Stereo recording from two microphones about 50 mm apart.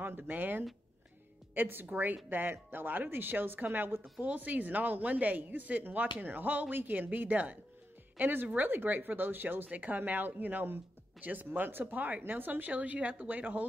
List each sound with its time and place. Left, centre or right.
0.3 s speech: right
4.2 s speech: right
9.7 s speech: right